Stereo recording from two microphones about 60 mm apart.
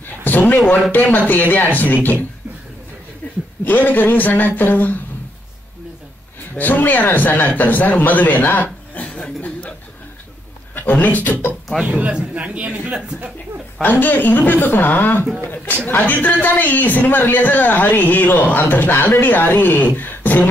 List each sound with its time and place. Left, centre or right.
0.0 s a sound: left
0.9 s a man's voice: left
3.6 s a man's voice: left
6.6 s a man's voice: left
9.0 s chuckle: centre
10.7 s a man's voice: left
11.8 s speech: centre
13.8 s a man's voice: left
20.0 s beatboxing: left